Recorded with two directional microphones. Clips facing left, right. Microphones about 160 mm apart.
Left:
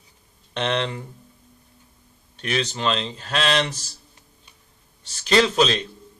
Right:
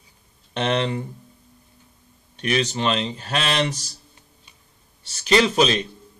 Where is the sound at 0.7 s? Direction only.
15° right (ahead or behind).